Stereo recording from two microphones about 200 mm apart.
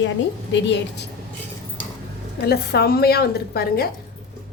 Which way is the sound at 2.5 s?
55° left (ahead or behind).